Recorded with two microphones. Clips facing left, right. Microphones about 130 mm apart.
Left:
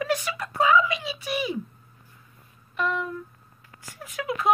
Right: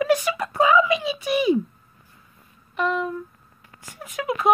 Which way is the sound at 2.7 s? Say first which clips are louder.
Right 4 dB; 25° right (ahead or behind).